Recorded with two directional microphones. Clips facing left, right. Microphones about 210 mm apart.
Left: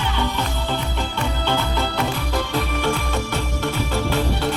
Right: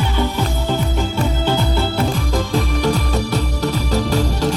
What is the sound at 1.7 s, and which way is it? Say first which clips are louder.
Music: right 4 dB; 10° right (ahead or behind).